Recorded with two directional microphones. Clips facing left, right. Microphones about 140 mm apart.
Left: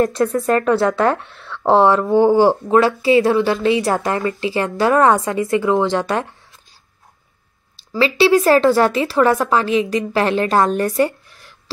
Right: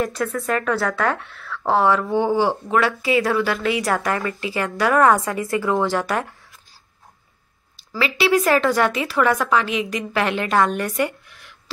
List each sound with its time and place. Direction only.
0.2 s a woman's voice: 25° left (ahead or behind)
2.0 s speech: 45° left (ahead or behind)
2.5 s a woman's voice: 20° left (ahead or behind)
7.9 s speech: 30° left (ahead or behind)